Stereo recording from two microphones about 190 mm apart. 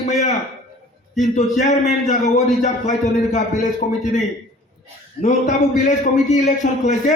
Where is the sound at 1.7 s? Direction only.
40° left (ahead or behind).